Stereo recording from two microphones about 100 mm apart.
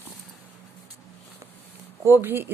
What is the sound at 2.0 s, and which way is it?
Speech, 25° right (ahead or behind).